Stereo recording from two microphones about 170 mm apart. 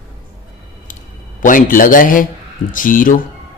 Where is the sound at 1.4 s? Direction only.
50° left (ahead or behind).